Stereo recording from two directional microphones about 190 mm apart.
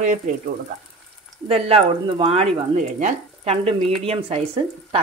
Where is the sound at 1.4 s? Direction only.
30° right (ahead or behind).